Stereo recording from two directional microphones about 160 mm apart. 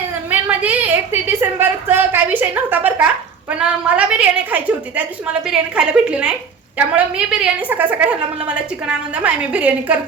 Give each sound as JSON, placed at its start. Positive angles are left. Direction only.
{"t": 0.3, "sound": "a woman's voice", "side_deg": -10}